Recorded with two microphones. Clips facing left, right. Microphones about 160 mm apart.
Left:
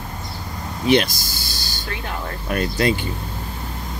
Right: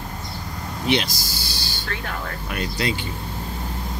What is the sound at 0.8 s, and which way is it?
Speech, 50° left (ahead or behind).